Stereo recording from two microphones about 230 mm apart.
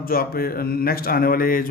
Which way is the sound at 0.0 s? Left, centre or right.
Left.